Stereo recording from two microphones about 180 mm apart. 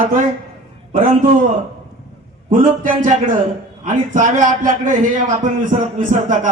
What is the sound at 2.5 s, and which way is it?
A man's voice, 45° right (ahead or behind).